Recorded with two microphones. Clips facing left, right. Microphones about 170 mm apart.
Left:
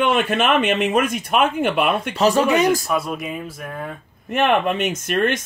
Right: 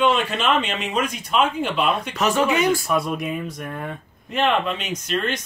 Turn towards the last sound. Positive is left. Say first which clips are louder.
# left 5 dB
turn(degrees=50)  # may be behind; listen again after turning